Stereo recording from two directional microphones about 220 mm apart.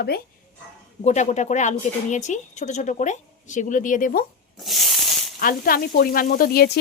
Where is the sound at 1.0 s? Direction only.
30° left (ahead or behind).